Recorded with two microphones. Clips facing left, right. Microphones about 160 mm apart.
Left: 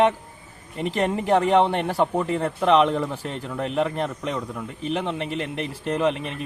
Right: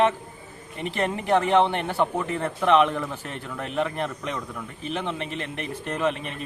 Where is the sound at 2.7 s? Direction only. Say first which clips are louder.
Left 1 dB; 35° left (ahead or behind).